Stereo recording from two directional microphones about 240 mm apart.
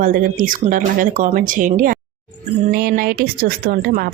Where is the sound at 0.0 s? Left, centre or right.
Right.